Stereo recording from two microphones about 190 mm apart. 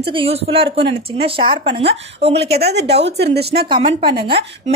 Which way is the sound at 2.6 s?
60° right (ahead or behind).